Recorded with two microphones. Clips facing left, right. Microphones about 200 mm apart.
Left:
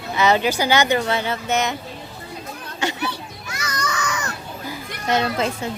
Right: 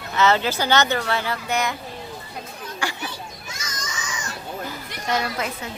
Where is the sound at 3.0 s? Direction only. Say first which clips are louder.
Left 5 dB; 65° left (ahead or behind).